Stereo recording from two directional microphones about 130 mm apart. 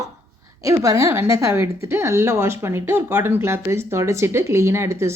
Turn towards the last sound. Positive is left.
turn(degrees=-20)  # may be behind; listen again after turning